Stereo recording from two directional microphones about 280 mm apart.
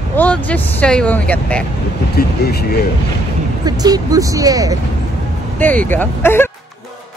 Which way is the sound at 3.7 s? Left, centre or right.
Centre.